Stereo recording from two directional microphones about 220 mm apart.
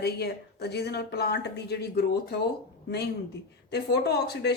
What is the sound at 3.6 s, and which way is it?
Speech, 45° left (ahead or behind).